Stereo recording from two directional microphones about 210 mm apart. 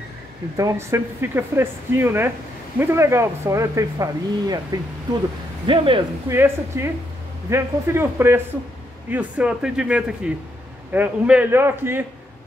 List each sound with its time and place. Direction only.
0.6 s speech: 15° right (ahead or behind)
5.7 s speech: 25° right (ahead or behind)
6.3 s speech: 10° right (ahead or behind)